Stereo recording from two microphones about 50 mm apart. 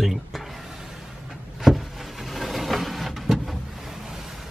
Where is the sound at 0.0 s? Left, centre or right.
Centre.